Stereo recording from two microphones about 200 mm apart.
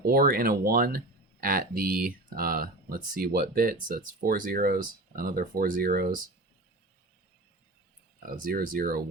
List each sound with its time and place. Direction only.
0.0 s speech: 50° right (ahead or behind)
8.2 s speech: 45° right (ahead or behind)